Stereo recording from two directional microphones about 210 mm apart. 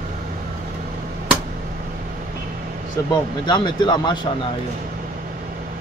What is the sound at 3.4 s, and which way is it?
Speech, 20° left (ahead or behind).